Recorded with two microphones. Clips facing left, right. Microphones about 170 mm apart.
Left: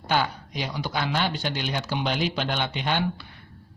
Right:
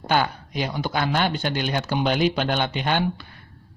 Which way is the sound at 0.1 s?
50° right (ahead or behind).